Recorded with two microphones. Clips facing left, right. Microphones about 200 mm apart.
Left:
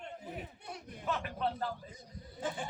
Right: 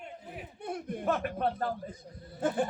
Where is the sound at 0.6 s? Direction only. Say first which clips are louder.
Right 11 dB; 55° right (ahead or behind).